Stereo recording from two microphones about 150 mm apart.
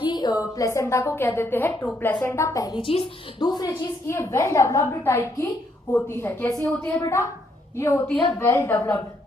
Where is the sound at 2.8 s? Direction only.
35° left (ahead or behind); by 6.9 s 5° left (ahead or behind).